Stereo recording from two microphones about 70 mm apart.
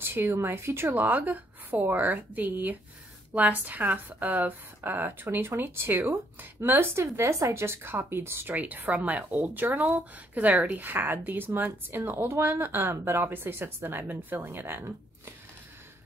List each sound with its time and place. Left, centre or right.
0.0 s speech: right